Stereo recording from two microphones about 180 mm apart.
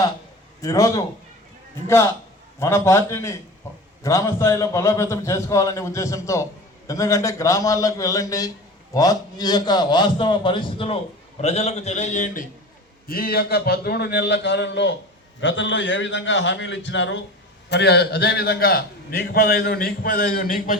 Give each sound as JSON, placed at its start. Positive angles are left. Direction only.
{"t": 0.6, "sound": "a man's voice", "side_deg": 20}
{"t": 2.6, "sound": "a man's voice", "side_deg": 15}
{"t": 15.4, "sound": "a man's voice", "side_deg": 90}
{"t": 17.7, "sound": "a man's voice", "side_deg": 70}